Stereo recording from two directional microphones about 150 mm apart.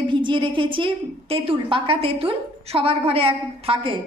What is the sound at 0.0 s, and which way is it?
A woman's voice, 35° right (ahead or behind).